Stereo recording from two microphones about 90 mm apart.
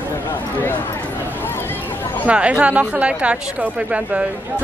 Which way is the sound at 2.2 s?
15° right (ahead or behind).